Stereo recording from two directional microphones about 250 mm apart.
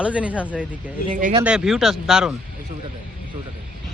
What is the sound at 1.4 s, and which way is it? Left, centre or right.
Speech, centre.